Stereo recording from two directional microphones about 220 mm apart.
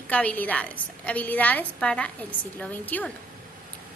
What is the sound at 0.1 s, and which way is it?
A child's voice, 5° left (ahead or behind).